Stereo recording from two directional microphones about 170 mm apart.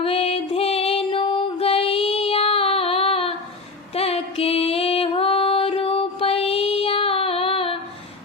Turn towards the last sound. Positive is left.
turn(degrees=35)  # may be behind; listen again after turning